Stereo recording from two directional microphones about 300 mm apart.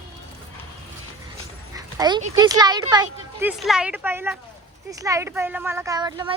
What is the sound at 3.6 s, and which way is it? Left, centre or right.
Speech, centre.